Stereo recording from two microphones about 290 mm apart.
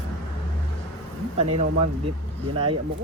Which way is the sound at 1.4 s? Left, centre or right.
Right.